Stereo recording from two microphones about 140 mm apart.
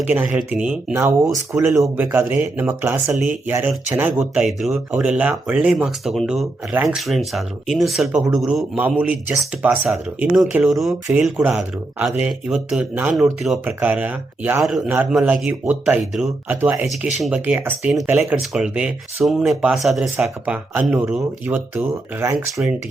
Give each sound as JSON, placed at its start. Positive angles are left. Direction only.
{"t": 0.3, "sound": "speech", "side_deg": -5}
{"t": 4.2, "sound": "speech", "side_deg": 0}
{"t": 10.5, "sound": "speech", "side_deg": 0}
{"t": 13.1, "sound": "speech", "side_deg": 0}
{"t": 16.6, "sound": "speech", "side_deg": -15}
{"t": 20.1, "sound": "speech", "side_deg": -15}